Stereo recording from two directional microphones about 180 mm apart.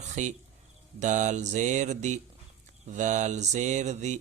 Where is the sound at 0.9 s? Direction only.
45° right (ahead or behind).